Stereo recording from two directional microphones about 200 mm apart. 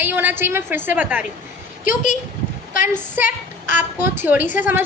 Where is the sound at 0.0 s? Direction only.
10° right (ahead or behind).